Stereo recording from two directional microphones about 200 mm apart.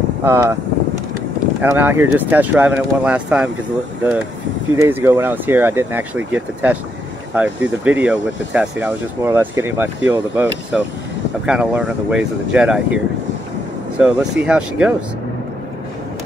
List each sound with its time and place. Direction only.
0.2 s speech: 10° right (ahead or behind)
1.6 s speech: 10° right (ahead or behind)
4.7 s speech: 10° right (ahead or behind)